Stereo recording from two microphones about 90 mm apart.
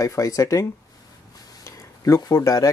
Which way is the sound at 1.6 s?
30° left (ahead or behind).